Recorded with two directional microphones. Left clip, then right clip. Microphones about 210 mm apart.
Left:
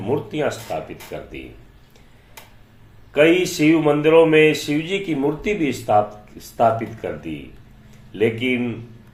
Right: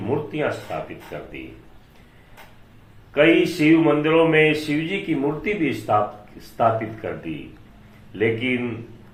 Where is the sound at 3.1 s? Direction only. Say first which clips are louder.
Left 1 dB; 40° left (ahead or behind).